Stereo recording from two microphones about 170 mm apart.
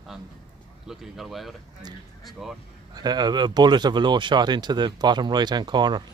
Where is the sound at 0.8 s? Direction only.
Centre (ahead or behind).